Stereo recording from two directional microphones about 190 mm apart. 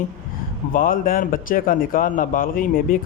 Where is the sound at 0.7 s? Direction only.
50° left (ahead or behind).